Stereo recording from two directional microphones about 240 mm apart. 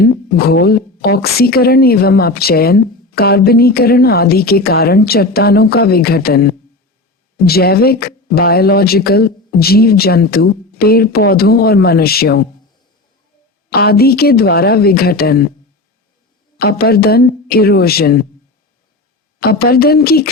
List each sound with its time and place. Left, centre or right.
0.0 s a woman's voice: left
13.7 s a woman's voice: left
16.6 s a woman's voice: left
19.4 s a woman's voice: left